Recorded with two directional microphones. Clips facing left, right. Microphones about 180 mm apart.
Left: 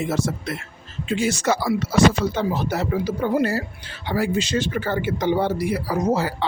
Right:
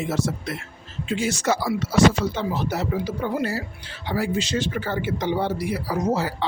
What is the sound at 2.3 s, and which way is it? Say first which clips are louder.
Speech: left 2 dB; 50° left (ahead or behind).